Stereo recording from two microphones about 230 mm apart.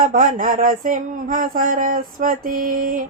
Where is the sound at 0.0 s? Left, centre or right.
Right.